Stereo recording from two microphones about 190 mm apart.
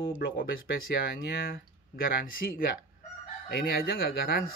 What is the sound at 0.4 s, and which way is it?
Speech, 50° left (ahead or behind).